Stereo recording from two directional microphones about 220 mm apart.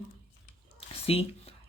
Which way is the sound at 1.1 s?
25° left (ahead or behind).